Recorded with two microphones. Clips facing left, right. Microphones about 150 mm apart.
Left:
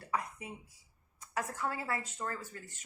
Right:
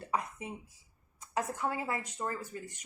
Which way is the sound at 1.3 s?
20° right (ahead or behind).